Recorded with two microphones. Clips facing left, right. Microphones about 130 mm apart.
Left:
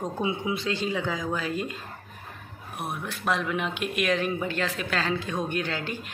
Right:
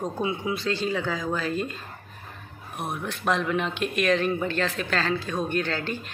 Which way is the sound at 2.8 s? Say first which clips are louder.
Right 2 dB; 5° left (ahead or behind).